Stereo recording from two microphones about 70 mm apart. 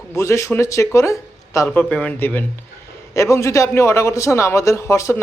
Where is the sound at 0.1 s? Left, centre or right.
Left.